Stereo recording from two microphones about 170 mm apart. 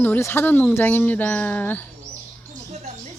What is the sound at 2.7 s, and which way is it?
Music, 40° right (ahead or behind).